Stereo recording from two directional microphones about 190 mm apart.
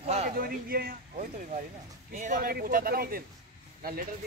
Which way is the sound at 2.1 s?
40° right (ahead or behind).